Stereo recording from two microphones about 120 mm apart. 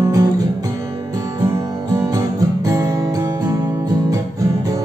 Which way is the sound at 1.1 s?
25° right (ahead or behind).